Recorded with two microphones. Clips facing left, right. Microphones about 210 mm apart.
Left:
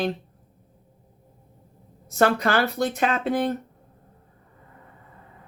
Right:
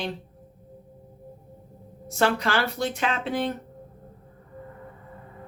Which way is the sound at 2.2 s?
50° left (ahead or behind).